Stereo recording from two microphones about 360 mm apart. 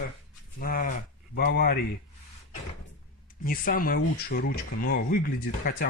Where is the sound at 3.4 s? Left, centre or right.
Left.